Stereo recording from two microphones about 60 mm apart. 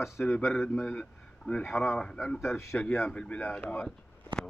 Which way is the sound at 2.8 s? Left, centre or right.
Left.